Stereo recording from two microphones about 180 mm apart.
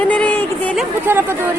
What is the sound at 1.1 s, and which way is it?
Speech, 10° right (ahead or behind).